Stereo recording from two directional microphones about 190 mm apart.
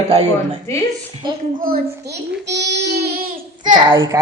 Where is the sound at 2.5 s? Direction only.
60° right (ahead or behind).